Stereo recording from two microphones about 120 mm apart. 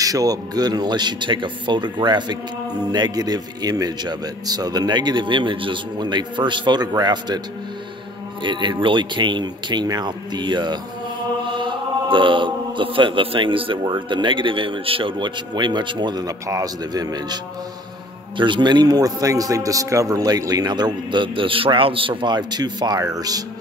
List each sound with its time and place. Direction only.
0.0 s speech: 30° right (ahead or behind)
18.4 s speech: 40° right (ahead or behind)